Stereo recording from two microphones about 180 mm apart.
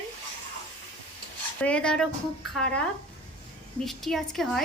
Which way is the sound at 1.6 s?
5° left (ahead or behind).